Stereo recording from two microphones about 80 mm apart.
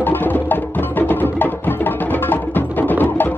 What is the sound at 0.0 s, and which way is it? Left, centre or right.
Music, left.